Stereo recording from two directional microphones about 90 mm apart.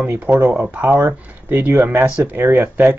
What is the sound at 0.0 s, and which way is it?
Speech, 25° right (ahead or behind).